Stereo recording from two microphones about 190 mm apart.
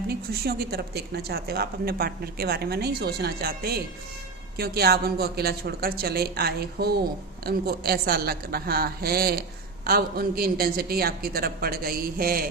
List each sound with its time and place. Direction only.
0.1 s a woman's voice: 55° right (ahead or behind)